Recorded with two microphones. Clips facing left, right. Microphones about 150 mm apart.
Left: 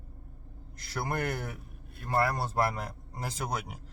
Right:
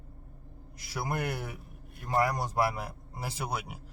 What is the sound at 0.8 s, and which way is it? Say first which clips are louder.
Speech: left 1 dB; 10° right (ahead or behind).